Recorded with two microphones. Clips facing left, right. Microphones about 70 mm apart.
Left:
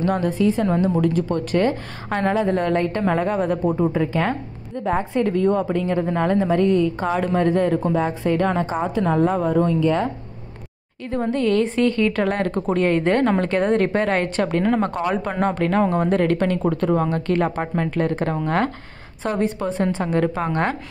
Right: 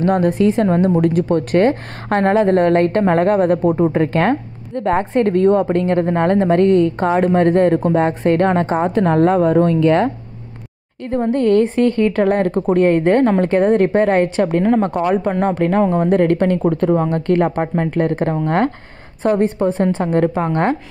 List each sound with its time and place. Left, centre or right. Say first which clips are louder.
0.0 s speech: right 6 dB; right
1.3 s a woman's voice: right 6 dB; right
11.1 s a woman's voice: right 5 dB; right
15.8 s speech: right 3 dB; centre
16.1 s a woman's voice: right 5 dB; right
16.6 s a woman's voice: right 4 dB; centre
17.1 s speech: right 5 dB; right